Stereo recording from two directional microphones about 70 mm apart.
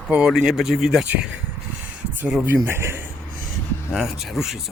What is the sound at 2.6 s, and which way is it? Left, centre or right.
Speech, right.